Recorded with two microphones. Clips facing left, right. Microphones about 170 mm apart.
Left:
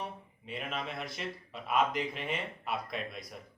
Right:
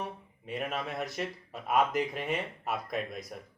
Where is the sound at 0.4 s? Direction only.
45° right (ahead or behind).